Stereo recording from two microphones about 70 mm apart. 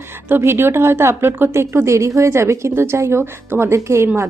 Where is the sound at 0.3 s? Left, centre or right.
Right.